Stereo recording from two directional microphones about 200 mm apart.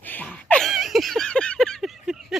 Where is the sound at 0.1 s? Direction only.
5° left (ahead or behind).